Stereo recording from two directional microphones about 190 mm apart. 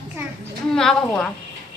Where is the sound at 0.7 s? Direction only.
5° left (ahead or behind).